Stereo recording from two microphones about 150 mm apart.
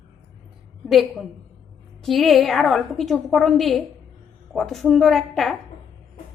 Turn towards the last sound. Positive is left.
turn(degrees=0)  # may be behind; listen again after turning